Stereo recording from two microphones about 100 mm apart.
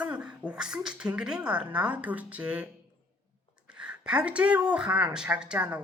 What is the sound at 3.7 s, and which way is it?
A woman's voice, 10° right (ahead or behind).